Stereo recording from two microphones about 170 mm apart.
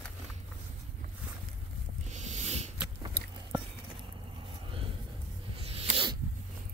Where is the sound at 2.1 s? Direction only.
45° right (ahead or behind).